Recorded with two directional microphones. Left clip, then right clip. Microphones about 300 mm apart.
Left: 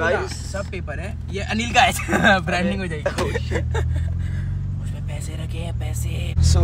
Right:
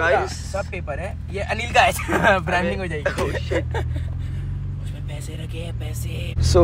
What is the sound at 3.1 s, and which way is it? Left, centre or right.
Speech, centre.